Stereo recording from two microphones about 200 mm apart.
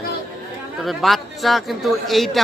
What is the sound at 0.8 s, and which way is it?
Speech, centre (ahead or behind).